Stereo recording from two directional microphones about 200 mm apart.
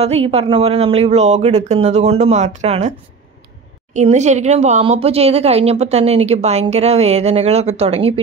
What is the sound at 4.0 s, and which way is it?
Speech, 35° right (ahead or behind).